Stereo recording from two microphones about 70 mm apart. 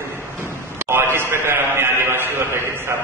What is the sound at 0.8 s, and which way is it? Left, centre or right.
A man's voice, right.